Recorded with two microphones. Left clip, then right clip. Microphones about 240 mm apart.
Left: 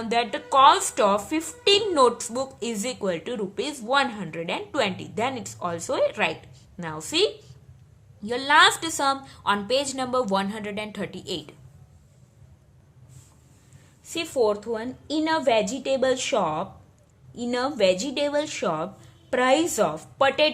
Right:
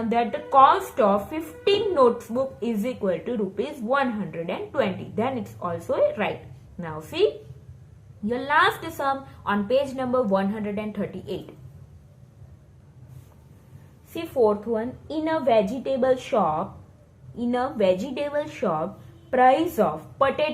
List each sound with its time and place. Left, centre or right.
0.1 s a woman's voice: left
8.3 s a woman's voice: left
14.1 s a woman's voice: left